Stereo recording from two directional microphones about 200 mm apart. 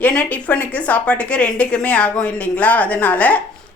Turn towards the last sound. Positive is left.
turn(degrees=5)  # may be behind; listen again after turning